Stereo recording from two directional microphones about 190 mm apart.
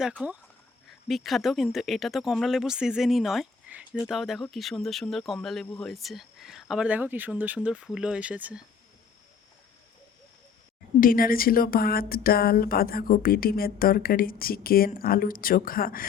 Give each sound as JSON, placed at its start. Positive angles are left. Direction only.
{"t": 0.0, "sound": "speech", "side_deg": -5}
{"t": 11.0, "sound": "speech", "side_deg": 50}